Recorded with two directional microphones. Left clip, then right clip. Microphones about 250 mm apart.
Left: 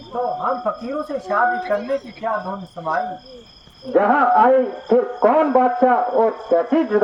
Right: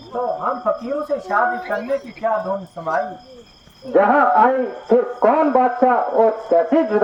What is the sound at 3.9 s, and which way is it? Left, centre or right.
A man's voice, right.